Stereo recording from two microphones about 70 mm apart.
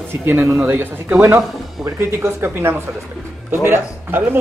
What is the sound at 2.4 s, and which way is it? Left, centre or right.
Speech, right.